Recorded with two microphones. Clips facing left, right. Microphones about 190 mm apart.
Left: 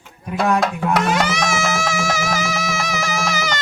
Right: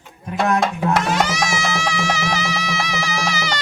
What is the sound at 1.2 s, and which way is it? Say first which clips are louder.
Music: left 2 dB; 55° left (ahead or behind).